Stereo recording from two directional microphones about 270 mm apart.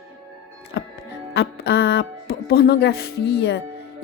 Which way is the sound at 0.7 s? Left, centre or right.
Left.